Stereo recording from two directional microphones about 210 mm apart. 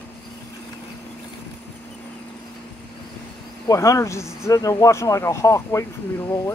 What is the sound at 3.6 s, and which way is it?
Speech, 15° left (ahead or behind).